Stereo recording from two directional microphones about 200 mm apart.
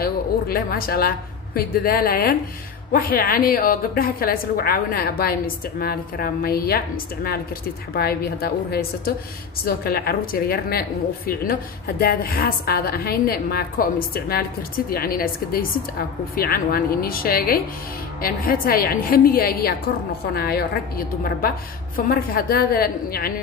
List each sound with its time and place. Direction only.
0.0 s a woman's voice: 50° left (ahead or behind)
7.9 s a woman's voice: 50° left (ahead or behind)
21.9 s a woman's voice: 45° left (ahead or behind)